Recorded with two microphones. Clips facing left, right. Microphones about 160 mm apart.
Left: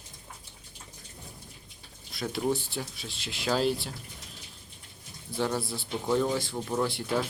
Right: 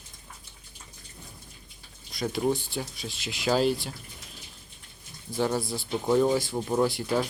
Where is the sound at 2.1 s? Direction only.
Centre (ahead or behind).